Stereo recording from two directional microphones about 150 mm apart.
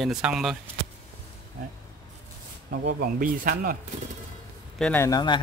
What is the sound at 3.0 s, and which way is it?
Speech, 70° right (ahead or behind).